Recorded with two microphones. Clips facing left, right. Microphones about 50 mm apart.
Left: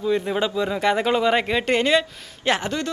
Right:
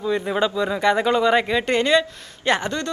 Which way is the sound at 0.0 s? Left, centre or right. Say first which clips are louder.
Right 1 dB; centre.